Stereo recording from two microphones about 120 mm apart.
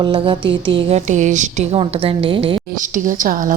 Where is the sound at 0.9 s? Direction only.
90° right; by 2.6 s 45° right (ahead or behind).